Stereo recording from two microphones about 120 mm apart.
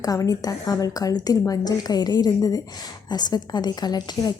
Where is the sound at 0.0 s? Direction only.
30° left (ahead or behind).